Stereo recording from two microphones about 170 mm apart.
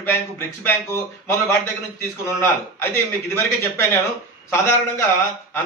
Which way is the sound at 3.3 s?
15° left (ahead or behind).